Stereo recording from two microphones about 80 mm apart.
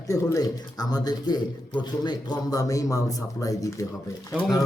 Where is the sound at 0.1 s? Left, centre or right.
Left.